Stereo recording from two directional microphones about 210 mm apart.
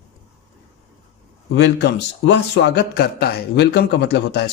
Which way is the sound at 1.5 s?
55° left (ahead or behind).